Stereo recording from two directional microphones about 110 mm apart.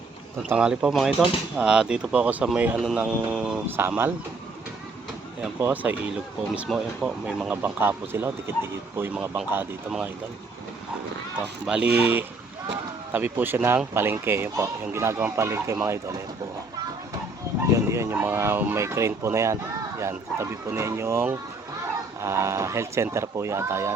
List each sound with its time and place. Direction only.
0.4 s speech: 10° right (ahead or behind)
3.8 s speech: 20° right (ahead or behind)
5.5 s speech: 15° right (ahead or behind)
7.6 s speech: 20° right (ahead or behind)
11.3 s speech: 10° right (ahead or behind); by 16.2 s 25° right (ahead or behind)
17.9 s speech: 25° right (ahead or behind)